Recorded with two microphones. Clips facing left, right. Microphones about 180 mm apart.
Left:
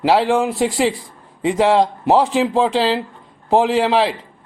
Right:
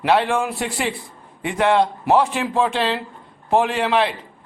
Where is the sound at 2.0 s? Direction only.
25° left (ahead or behind).